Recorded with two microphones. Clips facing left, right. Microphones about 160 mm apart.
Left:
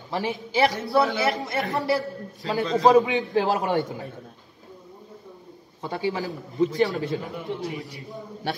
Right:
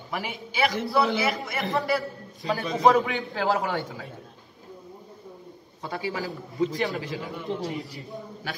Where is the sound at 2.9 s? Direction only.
20° left (ahead or behind).